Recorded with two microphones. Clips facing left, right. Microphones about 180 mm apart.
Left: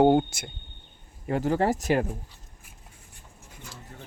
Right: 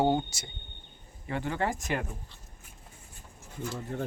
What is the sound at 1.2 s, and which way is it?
Speech, 40° left (ahead or behind).